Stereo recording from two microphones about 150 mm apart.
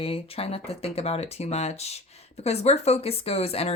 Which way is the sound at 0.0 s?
40° left (ahead or behind).